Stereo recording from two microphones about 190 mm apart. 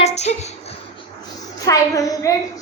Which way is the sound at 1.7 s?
15° left (ahead or behind).